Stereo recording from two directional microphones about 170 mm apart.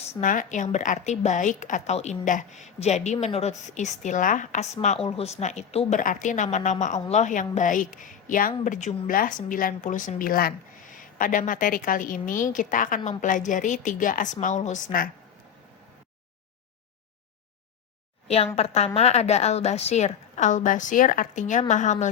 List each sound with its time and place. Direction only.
0.2 s a woman's voice: 50° left (ahead or behind)
18.3 s a woman's voice: 35° left (ahead or behind)